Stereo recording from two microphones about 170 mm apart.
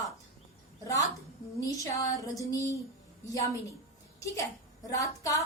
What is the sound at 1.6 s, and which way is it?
Speech, 20° left (ahead or behind).